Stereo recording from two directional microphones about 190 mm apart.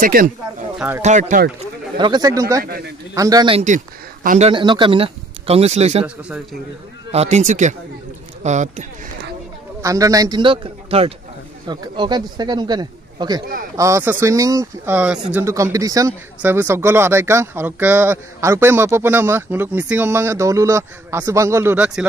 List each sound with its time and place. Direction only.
0.0 s speech: 45° right (ahead or behind)
0.7 s speech: 10° right (ahead or behind)
1.0 s speech: 40° right (ahead or behind)
2.0 s a man's voice: 25° right (ahead or behind)
2.6 s speech: 50° right (ahead or behind)
3.2 s a man's voice: 20° right (ahead or behind)
3.5 s speech: 40° right (ahead or behind)
4.5 s a man's voice: 25° right (ahead or behind)
6.0 s a man's voice: 5° right (ahead or behind)
7.1 s speech: 35° right (ahead or behind)
9.8 s a man's voice: 15° right (ahead or behind)